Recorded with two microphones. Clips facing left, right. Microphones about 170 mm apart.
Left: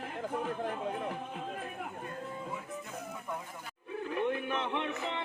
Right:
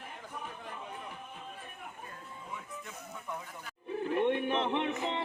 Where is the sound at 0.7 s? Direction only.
70° left (ahead or behind).